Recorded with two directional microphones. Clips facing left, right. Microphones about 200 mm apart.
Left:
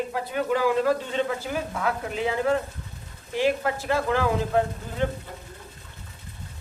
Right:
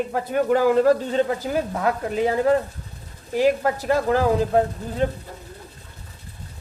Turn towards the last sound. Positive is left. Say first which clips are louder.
# right 4 dB
turn(degrees=-35)  # may be behind; listen again after turning